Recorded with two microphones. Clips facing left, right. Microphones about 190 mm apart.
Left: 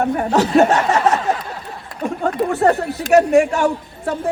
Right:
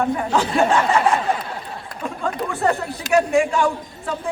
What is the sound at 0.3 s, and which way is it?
Snicker, 40° left (ahead or behind).